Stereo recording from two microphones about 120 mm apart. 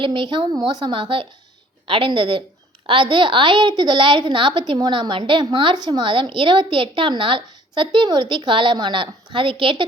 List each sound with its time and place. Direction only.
0.0 s a woman's voice: 45° right (ahead or behind)